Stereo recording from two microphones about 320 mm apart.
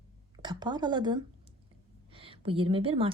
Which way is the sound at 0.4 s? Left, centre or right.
Centre.